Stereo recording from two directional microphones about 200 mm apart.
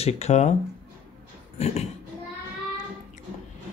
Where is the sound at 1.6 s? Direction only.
30° left (ahead or behind).